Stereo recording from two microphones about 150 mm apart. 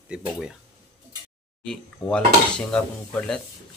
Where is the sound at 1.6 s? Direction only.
5° left (ahead or behind).